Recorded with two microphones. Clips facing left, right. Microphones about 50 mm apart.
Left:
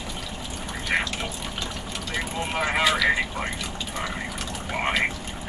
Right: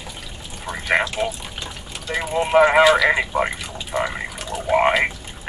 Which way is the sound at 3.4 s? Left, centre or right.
Centre.